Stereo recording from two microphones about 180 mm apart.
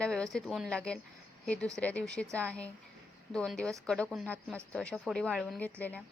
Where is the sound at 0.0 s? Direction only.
5° left (ahead or behind).